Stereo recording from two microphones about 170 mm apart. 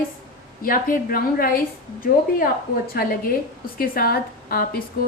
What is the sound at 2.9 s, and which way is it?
A woman's voice, 60° left (ahead or behind).